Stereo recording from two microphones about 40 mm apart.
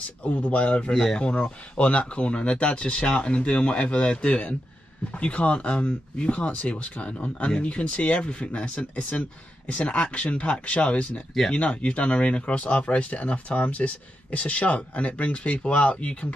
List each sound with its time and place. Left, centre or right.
0.2 s speech: left
1.0 s speech: left
1.3 s speech: left